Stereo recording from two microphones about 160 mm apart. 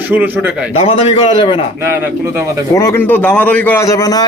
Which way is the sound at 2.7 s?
20° left (ahead or behind).